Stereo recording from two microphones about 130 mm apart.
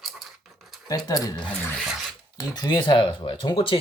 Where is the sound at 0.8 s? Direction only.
30° left (ahead or behind).